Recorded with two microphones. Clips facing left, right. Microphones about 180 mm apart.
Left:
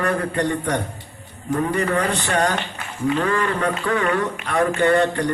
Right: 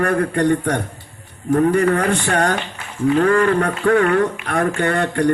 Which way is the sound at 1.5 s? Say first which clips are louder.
Right 6 dB; 60° right (ahead or behind).